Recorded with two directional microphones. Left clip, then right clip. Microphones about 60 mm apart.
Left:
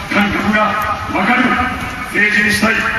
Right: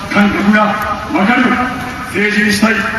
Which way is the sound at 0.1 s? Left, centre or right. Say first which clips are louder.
Right 2 dB; centre.